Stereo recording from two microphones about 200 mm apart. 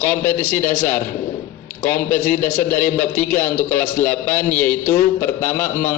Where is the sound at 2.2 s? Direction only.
40° left (ahead or behind).